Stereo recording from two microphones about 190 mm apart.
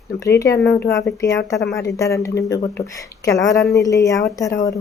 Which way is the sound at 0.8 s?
70° left (ahead or behind).